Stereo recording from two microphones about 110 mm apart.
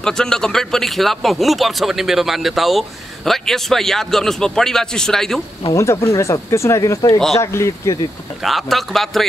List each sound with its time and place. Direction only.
0.0 s a man's voice: 5° left (ahead or behind)
5.7 s speech: 25° left (ahead or behind)
8.5 s a man's voice: centre (ahead or behind)